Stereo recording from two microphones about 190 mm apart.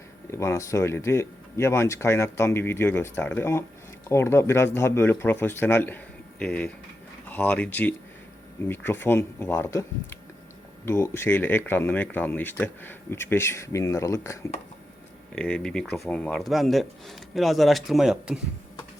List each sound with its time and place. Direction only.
0.3 s speech: 15° left (ahead or behind); by 18.3 s centre (ahead or behind)